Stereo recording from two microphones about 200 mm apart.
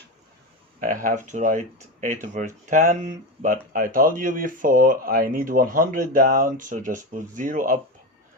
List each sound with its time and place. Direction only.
0.8 s speech: 45° right (ahead or behind)